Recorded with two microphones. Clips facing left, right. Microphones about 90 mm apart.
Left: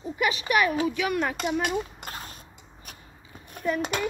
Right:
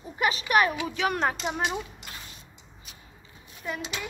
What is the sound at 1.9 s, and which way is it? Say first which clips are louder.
Creak: left 5 dB; 45° left (ahead or behind).